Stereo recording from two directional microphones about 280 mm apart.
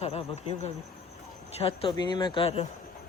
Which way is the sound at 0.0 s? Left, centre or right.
Left.